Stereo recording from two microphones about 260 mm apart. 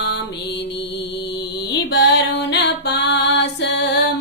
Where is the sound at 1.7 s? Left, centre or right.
Left.